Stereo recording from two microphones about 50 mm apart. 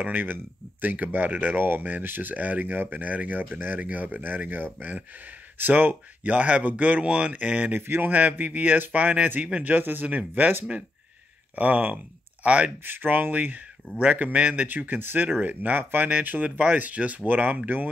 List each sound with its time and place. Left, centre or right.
0.0 s speech: right
7.7 s a sound: right
8.1 s speech: right
11.5 s speech: right
12.8 s speech: right